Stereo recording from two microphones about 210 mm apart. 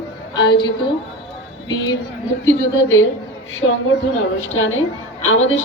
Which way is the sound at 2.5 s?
70° left (ahead or behind).